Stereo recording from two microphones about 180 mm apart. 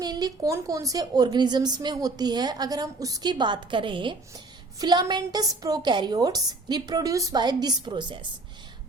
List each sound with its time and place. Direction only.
0.0 s a woman's voice: 20° right (ahead or behind)